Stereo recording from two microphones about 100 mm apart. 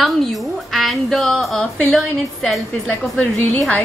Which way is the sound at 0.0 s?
Centre (ahead or behind).